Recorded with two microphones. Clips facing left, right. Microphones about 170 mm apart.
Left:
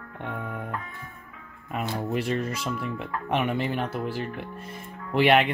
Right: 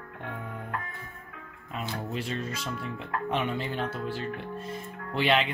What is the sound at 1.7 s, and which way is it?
Speech, 60° left (ahead or behind).